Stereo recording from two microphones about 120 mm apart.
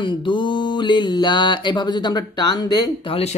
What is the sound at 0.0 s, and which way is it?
Mantra, 40° left (ahead or behind).